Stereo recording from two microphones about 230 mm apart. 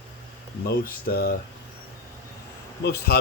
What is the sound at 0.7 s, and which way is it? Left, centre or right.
Speech, left.